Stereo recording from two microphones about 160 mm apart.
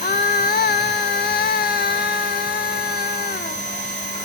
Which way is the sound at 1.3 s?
80° left.